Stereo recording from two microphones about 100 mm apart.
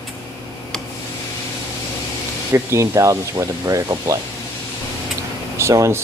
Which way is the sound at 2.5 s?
30° right (ahead or behind).